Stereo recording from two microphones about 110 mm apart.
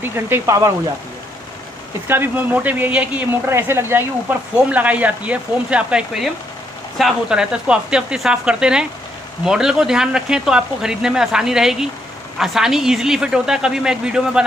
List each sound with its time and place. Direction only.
0.0 s speech: 20° right (ahead or behind)
2.0 s a man's voice: 15° right (ahead or behind)